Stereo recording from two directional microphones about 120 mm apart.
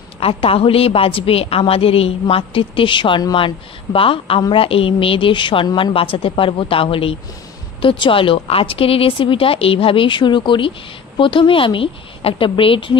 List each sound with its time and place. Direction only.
0.2 s a woman's voice: 50° left (ahead or behind)